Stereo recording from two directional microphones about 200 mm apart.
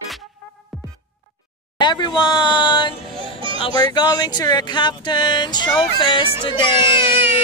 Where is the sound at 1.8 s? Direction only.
20° left (ahead or behind).